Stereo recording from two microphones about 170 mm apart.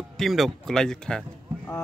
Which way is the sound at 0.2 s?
Centre (ahead or behind).